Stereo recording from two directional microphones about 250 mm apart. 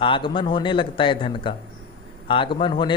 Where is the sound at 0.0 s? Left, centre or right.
Centre.